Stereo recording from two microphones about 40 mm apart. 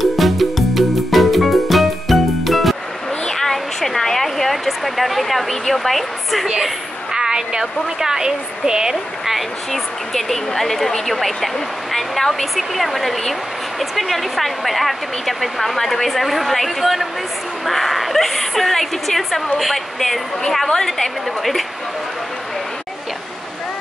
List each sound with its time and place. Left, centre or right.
0.0 s music: centre
3.3 s a sound: centre
6.6 s speech: centre
9.7 s a woman's voice: centre